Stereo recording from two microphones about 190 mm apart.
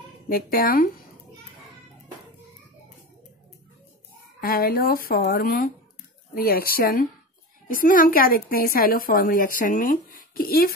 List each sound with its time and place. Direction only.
0.3 s a woman's voice: 50° left (ahead or behind)
4.4 s a woman's voice: 50° left (ahead or behind)